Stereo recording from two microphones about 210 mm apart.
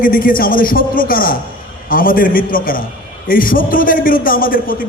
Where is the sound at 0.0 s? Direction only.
40° left (ahead or behind).